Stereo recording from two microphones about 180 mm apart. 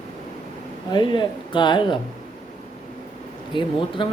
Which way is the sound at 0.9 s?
25° left (ahead or behind).